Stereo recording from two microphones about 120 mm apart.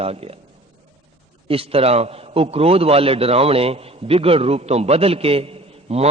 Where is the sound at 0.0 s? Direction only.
55° right (ahead or behind).